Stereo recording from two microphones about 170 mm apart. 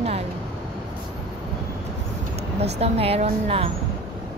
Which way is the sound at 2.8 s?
35° right (ahead or behind).